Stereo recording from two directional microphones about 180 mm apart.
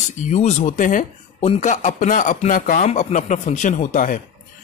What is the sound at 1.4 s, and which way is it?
Speech, 35° left (ahead or behind).